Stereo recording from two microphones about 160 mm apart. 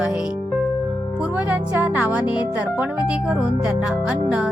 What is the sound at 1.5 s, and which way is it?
Speech, 10° right (ahead or behind).